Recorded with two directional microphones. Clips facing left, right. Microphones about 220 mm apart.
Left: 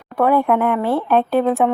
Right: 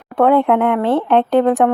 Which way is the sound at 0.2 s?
20° right (ahead or behind).